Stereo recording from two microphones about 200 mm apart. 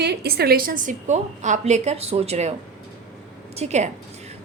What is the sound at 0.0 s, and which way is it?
A woman's voice, 55° right (ahead or behind).